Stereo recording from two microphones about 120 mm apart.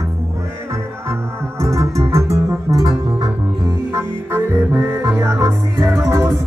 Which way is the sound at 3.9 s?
20° right (ahead or behind).